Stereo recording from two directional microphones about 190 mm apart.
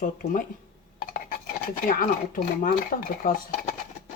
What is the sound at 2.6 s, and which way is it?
Speech, 45° left (ahead or behind).